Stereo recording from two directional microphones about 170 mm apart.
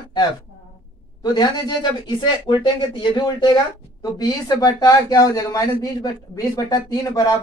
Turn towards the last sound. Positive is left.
turn(degrees=20)  # may be behind; listen again after turning